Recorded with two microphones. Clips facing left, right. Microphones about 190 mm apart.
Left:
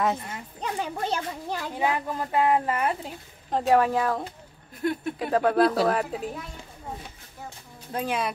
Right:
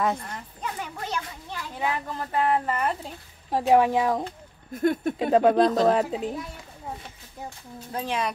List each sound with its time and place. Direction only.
0.0 s a woman's voice: 5° left (ahead or behind)
0.6 s a child's voice: 30° left (ahead or behind)
1.8 s a woman's voice: 15° left (ahead or behind)
3.4 s speech: 10° right (ahead or behind)
4.7 s speech: 45° right (ahead or behind)
5.2 s a woman's voice: 20° right (ahead or behind)
7.9 s a woman's voice: 5° left (ahead or behind)